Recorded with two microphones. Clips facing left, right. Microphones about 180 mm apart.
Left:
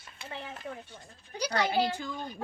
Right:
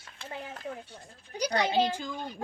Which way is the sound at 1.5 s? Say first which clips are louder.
Right 1 dB; 20° right (ahead or behind).